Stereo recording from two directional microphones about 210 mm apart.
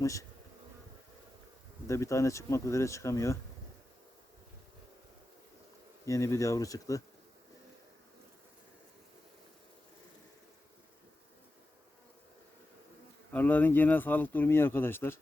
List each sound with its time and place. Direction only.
0.0 s speech: 15° left (ahead or behind)
1.9 s speech: 15° left (ahead or behind)
6.1 s speech: 15° left (ahead or behind)
13.3 s speech: 10° left (ahead or behind)